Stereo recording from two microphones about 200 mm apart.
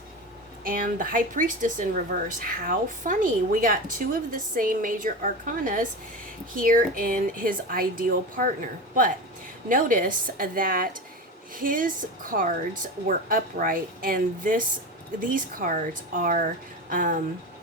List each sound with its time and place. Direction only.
0.6 s a woman's voice: 45° right (ahead or behind)
9.6 s a woman's voice: 45° right (ahead or behind)